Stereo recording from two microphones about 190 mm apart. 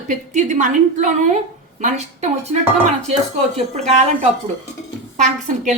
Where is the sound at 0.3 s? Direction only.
40° right (ahead or behind).